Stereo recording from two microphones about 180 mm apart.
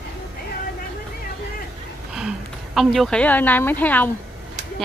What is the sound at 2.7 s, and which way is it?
Speech, centre (ahead or behind).